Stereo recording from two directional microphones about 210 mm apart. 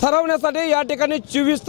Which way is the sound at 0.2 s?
25° left (ahead or behind).